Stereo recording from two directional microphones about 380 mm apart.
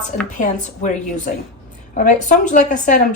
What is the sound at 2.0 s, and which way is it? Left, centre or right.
A woman's voice, centre.